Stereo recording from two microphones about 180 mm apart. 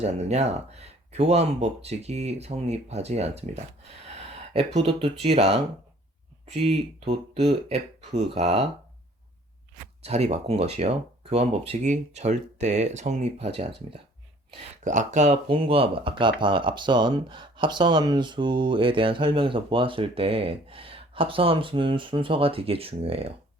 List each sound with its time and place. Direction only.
0.0 s speech: 35° right (ahead or behind)
10.0 s speech: 35° right (ahead or behind)
14.8 s speech: 45° right (ahead or behind)